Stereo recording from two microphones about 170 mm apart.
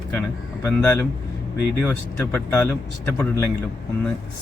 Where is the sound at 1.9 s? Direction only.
10° left (ahead or behind).